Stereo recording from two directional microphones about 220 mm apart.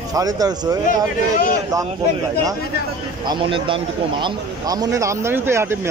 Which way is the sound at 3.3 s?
25° right (ahead or behind).